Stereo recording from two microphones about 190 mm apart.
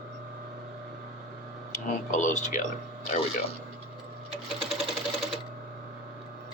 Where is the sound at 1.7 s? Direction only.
40° left (ahead or behind).